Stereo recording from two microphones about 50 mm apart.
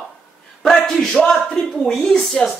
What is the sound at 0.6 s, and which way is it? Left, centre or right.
Speech, centre.